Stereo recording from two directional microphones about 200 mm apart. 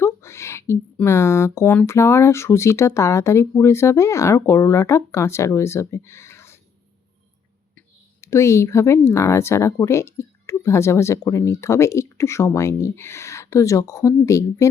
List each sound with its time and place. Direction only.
0.0 s speech: 15° left (ahead or behind)
7.8 s speech: 15° left (ahead or behind)